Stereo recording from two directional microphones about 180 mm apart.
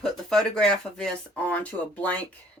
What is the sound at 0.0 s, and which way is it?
Speech, 5° left (ahead or behind).